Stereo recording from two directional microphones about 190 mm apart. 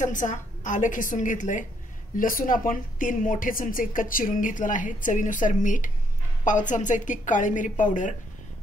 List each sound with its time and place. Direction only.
0.0 s a woman's voice: 40° left (ahead or behind)